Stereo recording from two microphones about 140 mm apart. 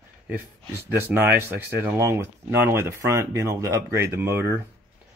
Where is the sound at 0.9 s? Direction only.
15° right (ahead or behind).